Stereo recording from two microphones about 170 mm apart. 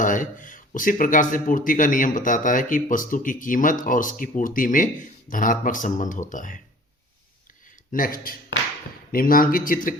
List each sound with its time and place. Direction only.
0.0 s speech: 50° left (ahead or behind)
7.9 s speech: 55° left (ahead or behind)